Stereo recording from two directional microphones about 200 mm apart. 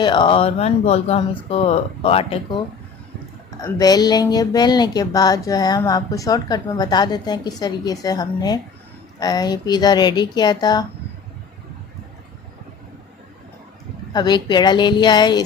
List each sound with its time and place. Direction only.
0.0 s speech: 25° left (ahead or behind)
3.6 s speech: 20° left (ahead or behind)
14.1 s speech: 20° left (ahead or behind)